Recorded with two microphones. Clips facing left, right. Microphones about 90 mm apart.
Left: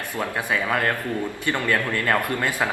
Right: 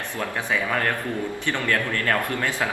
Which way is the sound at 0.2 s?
15° left (ahead or behind).